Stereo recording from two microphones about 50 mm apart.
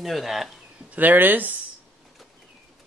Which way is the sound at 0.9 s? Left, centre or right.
Right.